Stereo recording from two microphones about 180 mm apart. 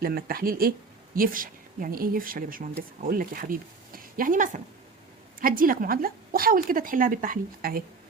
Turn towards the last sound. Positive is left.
turn(degrees=-55)  # may be behind; listen again after turning